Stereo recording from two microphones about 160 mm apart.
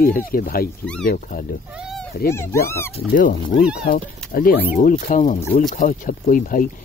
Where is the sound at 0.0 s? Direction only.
65° left (ahead or behind).